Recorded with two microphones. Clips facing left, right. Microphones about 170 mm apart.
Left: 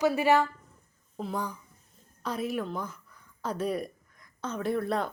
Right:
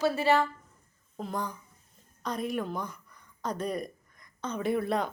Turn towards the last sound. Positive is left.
turn(degrees=0)  # may be behind; listen again after turning